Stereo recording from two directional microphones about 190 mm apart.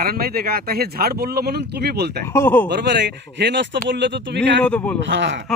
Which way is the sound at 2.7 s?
65° right (ahead or behind).